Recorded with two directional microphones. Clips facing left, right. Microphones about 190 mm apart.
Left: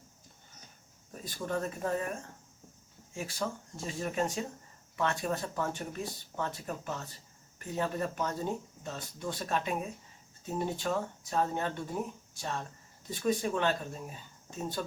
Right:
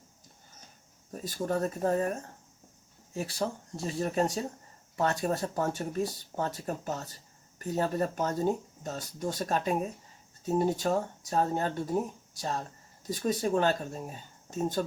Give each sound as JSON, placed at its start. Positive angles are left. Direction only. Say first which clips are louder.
{"t": 1.1, "sound": "speech", "louder": "right 4 dB", "side_deg": -40}
{"t": 3.2, "sound": "speech", "louder": "right 3 dB", "side_deg": -35}